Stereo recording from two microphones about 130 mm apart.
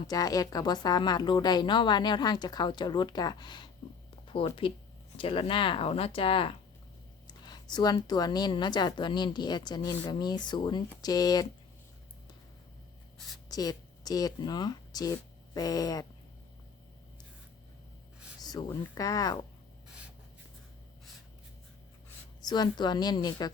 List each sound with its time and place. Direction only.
0.1 s speech: 30° left (ahead or behind); by 6.5 s 45° left (ahead or behind)
7.3 s speech: 30° left (ahead or behind)
13.1 s a sound: centre (ahead or behind)
13.5 s speech: 30° left (ahead or behind)
18.3 s speech: 30° left (ahead or behind)
22.4 s speech: 30° left (ahead or behind)